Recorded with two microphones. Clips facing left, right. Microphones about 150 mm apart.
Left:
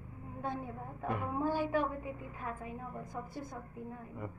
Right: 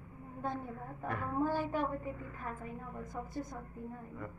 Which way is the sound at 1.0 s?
15° left (ahead or behind).